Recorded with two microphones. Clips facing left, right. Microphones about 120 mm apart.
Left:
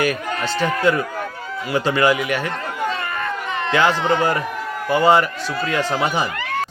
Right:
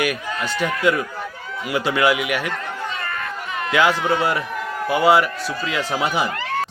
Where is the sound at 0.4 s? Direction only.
35° left (ahead or behind).